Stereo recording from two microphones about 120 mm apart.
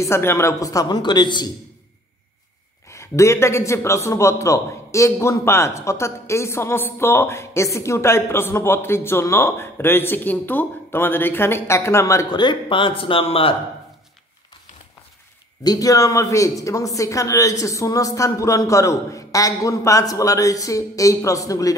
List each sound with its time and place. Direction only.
0.0 s a man's voice: 20° left (ahead or behind); by 1.5 s 40° left (ahead or behind)
2.9 s a man's voice: 25° left (ahead or behind)
12.3 s speech: 40° left (ahead or behind)
15.6 s a man's voice: 30° left (ahead or behind)